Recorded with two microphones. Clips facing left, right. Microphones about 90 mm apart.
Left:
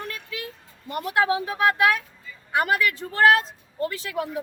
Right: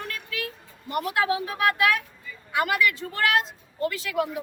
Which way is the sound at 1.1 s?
30° left (ahead or behind).